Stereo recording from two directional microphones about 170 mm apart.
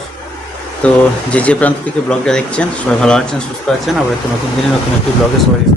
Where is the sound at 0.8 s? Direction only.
5° left (ahead or behind).